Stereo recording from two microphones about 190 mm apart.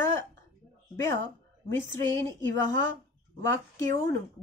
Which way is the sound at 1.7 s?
10° left (ahead or behind).